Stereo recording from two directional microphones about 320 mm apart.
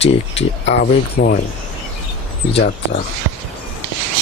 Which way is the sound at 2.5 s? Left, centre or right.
Left.